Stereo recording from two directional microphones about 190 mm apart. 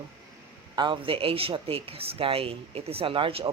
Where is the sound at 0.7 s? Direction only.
25° right (ahead or behind).